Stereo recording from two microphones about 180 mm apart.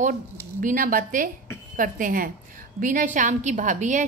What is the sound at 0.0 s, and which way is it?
A woman's voice, 45° right (ahead or behind).